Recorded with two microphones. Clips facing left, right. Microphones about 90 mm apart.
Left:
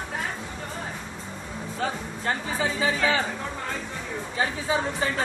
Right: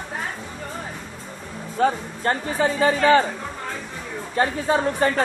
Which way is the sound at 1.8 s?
55° right (ahead or behind).